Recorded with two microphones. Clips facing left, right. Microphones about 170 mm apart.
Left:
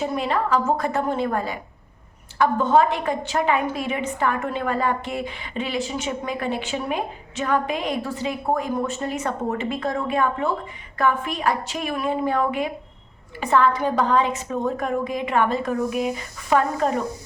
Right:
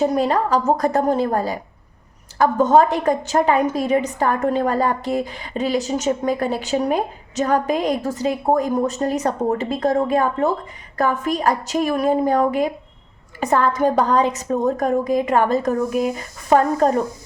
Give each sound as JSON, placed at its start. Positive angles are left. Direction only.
{"t": 0.0, "sound": "a woman's voice", "side_deg": -40}